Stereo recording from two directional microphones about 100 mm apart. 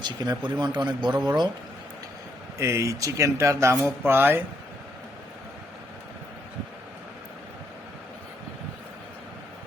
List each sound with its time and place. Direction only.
0.0 s a man's voice: 45° right (ahead or behind)
2.6 s speech: 30° right (ahead or behind)